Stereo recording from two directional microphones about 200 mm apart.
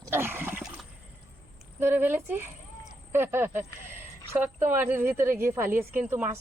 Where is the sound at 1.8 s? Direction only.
10° right (ahead or behind).